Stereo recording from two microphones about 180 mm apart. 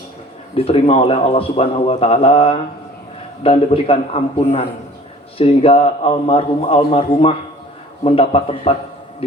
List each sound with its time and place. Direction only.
0.5 s a man's voice: 30° left (ahead or behind)